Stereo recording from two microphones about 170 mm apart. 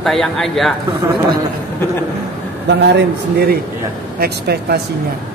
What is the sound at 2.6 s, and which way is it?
A man's voice, 85° right.